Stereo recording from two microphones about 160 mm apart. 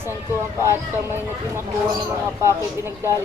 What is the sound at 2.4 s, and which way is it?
Speech, 15° right (ahead or behind).